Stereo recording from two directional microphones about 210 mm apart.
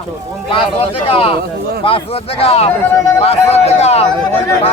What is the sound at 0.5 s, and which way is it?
A man's voice, 30° left (ahead or behind).